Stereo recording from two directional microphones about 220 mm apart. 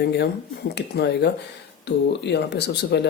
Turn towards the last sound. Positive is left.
turn(degrees=50)  # may be behind; listen again after turning